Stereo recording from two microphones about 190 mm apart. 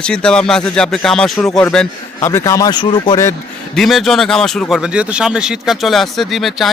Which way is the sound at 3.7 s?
Centre (ahead or behind).